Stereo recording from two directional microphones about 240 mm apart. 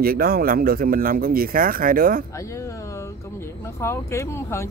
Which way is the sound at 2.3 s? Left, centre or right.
Centre.